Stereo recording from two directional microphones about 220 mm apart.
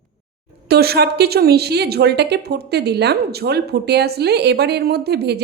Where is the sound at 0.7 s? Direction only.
45° right (ahead or behind).